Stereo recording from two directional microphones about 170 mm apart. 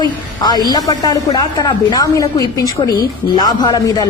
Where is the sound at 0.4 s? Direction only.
25° left (ahead or behind).